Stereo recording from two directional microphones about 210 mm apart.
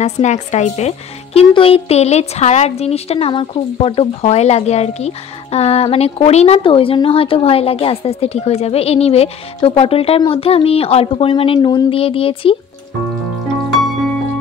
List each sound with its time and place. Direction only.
0.0 s speech: 35° left (ahead or behind)